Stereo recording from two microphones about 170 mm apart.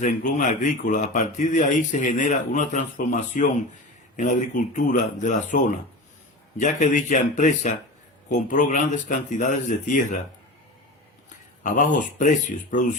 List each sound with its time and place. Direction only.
0.0 s a man's voice: 50° left (ahead or behind)
11.6 s a man's voice: 50° left (ahead or behind)